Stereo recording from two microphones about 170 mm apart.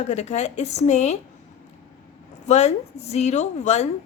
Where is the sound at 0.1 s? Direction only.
40° left (ahead or behind).